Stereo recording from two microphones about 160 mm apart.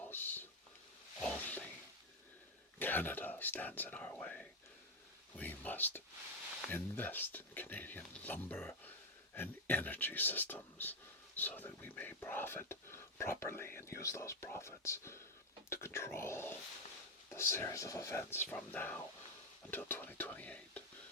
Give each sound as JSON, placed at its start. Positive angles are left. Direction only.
{"t": 0.1, "sound": "speech", "side_deg": 10}
{"t": 1.2, "sound": "a sound", "side_deg": 10}
{"t": 2.7, "sound": "speech", "side_deg": 10}